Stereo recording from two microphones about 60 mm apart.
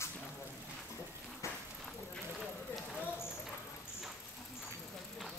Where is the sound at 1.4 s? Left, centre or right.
Left.